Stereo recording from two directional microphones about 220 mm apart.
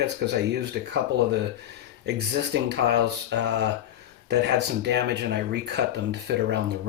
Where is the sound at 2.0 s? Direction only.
50° right (ahead or behind).